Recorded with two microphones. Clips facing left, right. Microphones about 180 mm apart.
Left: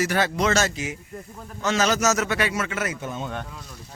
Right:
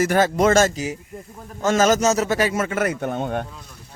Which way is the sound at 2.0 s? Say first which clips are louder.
Right 4 dB; 35° right (ahead or behind).